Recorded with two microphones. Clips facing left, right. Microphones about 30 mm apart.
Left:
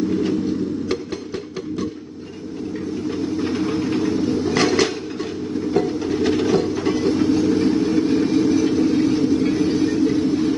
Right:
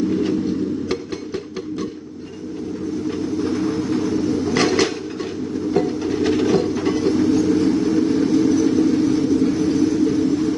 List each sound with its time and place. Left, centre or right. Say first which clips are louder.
0.1 s vehicle: even; centre
3.2 s vehicle: even; left
4.6 s a sound: even; centre
5.7 s train: even; centre
8.4 s vehicle: right 2 dB; centre